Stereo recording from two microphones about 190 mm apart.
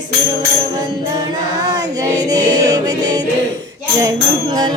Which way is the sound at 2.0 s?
20° right (ahead or behind).